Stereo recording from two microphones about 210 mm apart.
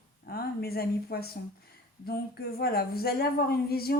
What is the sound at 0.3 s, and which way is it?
Speech, 45° left (ahead or behind).